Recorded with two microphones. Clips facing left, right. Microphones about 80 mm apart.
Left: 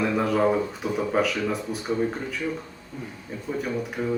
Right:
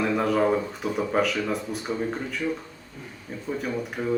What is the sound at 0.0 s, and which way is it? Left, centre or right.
Speech, centre.